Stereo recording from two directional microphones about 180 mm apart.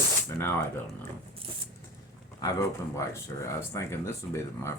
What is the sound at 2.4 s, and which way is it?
Speech, 15° left (ahead or behind).